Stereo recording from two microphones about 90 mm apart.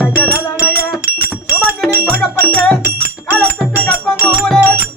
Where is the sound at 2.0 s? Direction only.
15° left (ahead or behind).